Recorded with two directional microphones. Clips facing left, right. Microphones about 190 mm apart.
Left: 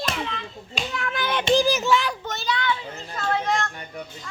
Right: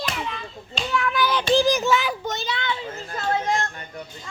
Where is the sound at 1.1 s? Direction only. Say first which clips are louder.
Even; 25° left (ahead or behind).